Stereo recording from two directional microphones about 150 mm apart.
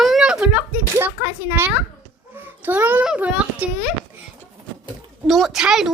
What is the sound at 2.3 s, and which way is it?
A child's voice, 15° right (ahead or behind).